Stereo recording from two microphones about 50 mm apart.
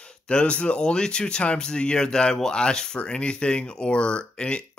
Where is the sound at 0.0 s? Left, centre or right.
Left.